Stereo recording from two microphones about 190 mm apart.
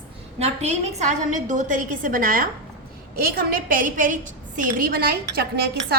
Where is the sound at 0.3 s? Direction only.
35° right (ahead or behind); by 5.5 s 55° right (ahead or behind).